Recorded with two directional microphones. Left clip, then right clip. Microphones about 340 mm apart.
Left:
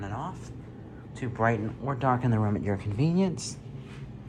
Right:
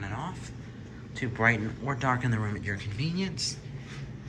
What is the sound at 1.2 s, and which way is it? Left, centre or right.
Speech, centre.